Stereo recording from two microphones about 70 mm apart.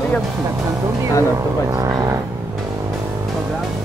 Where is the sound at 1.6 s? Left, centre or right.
Right.